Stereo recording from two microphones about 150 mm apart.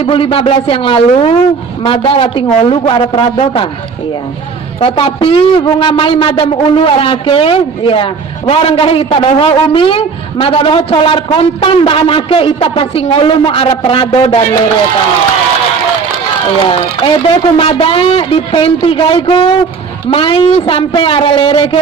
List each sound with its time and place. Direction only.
0.0 s a woman's voice: 40° left (ahead or behind)
4.7 s a woman's voice: 35° left (ahead or behind)
16.6 s a woman's voice: 40° left (ahead or behind)